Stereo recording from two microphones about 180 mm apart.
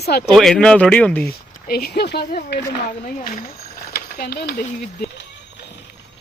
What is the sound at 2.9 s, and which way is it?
Speech, 50° left (ahead or behind).